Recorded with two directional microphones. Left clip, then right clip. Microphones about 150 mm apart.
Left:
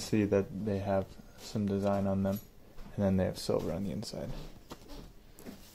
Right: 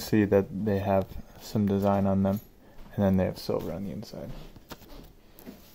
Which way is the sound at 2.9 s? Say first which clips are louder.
Right 5 dB; 25° right (ahead or behind).